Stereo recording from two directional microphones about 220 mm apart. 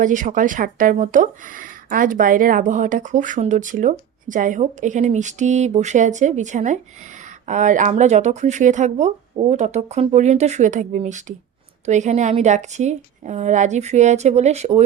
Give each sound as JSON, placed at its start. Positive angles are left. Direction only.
{"t": 0.0, "sound": "speech", "side_deg": -35}